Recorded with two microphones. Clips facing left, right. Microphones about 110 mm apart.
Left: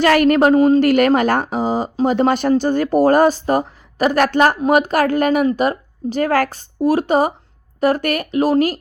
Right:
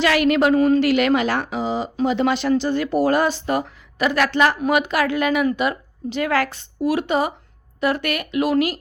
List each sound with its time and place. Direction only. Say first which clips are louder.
0.0 s speech: left 4 dB; 45° left (ahead or behind)
0.8 s a woman's voice: left 4 dB; 45° left (ahead or behind)